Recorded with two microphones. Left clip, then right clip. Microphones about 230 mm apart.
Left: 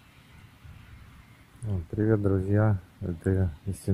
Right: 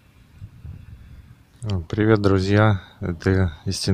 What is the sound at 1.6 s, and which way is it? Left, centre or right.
Speech, right.